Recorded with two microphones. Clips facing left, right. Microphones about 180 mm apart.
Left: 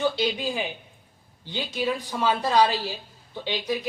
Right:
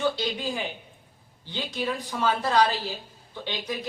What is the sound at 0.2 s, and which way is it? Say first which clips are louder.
A woman's voice: left 3 dB; 15° left (ahead or behind).